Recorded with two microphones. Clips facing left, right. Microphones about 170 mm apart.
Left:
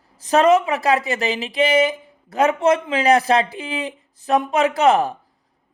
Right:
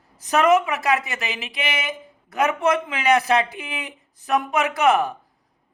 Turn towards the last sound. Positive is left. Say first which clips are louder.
# left 3 dB
turn(degrees=30)  # may be behind; listen again after turning